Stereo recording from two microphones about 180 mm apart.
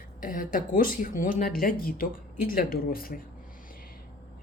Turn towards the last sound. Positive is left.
turn(degrees=55)  # may be behind; listen again after turning